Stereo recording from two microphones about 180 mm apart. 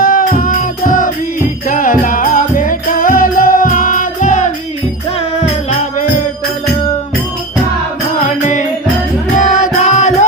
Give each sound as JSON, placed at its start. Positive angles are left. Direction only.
{"t": 0.0, "sound": "music", "side_deg": 50}
{"t": 9.3, "sound": "music", "side_deg": 45}